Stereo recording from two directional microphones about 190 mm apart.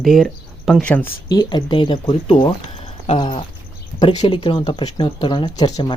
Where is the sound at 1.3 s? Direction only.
20° left (ahead or behind).